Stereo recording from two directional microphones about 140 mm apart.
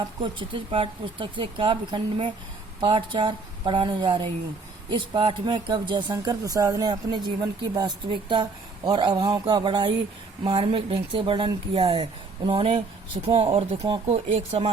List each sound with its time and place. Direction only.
0.2 s speech: 35° right (ahead or behind)